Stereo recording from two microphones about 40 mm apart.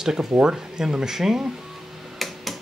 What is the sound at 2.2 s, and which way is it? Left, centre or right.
Tick-tock, centre.